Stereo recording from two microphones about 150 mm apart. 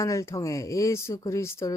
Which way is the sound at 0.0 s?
20° left (ahead or behind).